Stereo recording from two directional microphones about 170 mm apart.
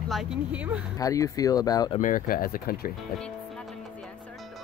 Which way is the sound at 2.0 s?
55° left (ahead or behind).